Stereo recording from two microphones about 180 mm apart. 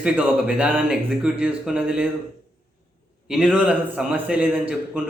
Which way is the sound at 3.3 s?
5° right (ahead or behind).